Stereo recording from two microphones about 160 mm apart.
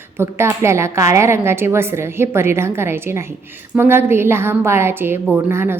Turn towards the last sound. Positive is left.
turn(degrees=-15)  # may be behind; listen again after turning